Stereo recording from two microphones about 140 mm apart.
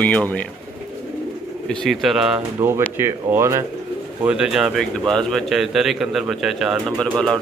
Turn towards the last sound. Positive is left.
turn(degrees=5)  # may be behind; listen again after turning